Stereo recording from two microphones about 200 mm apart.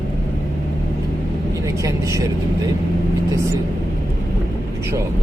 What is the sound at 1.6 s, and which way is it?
Speech, 15° right (ahead or behind).